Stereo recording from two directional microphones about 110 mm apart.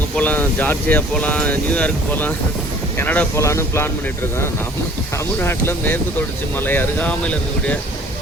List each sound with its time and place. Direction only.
0.2 s speech: 15° left (ahead or behind)
3.3 s speech: 25° left (ahead or behind)
5.1 s speech: 20° left (ahead or behind)